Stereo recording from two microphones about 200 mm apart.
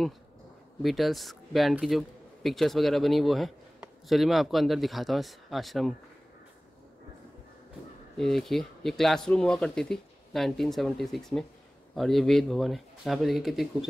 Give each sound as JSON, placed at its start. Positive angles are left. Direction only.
{"t": 0.8, "sound": "speech", "side_deg": 0}
{"t": 8.2, "sound": "speech", "side_deg": 0}